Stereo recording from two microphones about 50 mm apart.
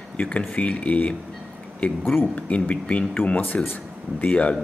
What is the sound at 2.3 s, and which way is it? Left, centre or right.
Speech, left.